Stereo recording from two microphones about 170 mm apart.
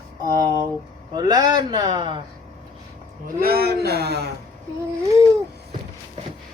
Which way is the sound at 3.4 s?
65° right (ahead or behind).